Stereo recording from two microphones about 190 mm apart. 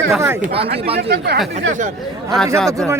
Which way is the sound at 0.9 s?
60° right (ahead or behind).